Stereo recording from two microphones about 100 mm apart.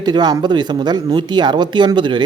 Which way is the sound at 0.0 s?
45° right (ahead or behind).